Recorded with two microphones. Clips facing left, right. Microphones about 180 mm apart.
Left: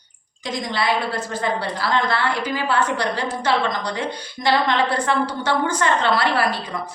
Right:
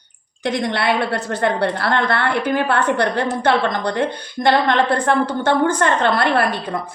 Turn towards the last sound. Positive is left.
turn(degrees=-55)  # may be behind; listen again after turning